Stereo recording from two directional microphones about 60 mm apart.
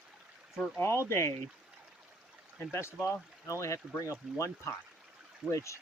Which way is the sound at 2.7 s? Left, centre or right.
Left.